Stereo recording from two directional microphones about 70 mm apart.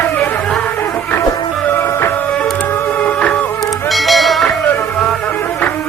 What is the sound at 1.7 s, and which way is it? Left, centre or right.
Music, left.